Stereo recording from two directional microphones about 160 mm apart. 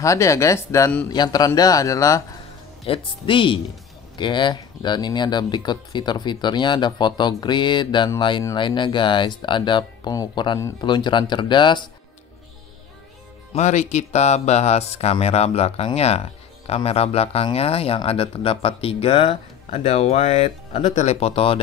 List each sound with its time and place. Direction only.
0.0 s speech: 20° left (ahead or behind)
2.8 s speech: 35° left (ahead or behind)
13.5 s speech: 45° left (ahead or behind)